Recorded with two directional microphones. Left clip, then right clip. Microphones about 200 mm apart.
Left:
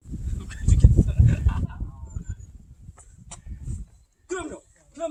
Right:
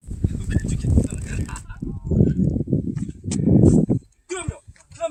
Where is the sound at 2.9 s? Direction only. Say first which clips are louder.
Right 17 dB; 40° right (ahead or behind).